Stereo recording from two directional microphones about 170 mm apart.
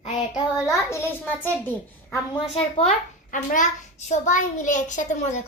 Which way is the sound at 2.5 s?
40° left (ahead or behind).